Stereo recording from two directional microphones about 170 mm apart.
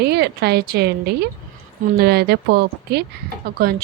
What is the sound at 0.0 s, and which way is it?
Speech, 70° right (ahead or behind).